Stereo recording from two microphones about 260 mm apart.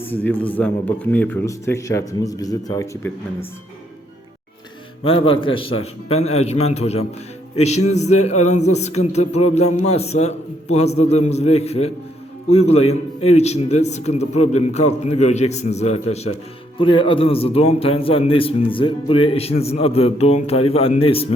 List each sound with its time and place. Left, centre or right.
0.0 s speech: centre
5.0 s a man's voice: left